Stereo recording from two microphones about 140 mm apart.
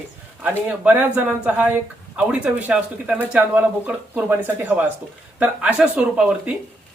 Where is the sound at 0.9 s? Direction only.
10° right (ahead or behind).